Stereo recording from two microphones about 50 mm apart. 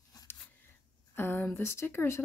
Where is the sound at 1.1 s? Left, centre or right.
Left.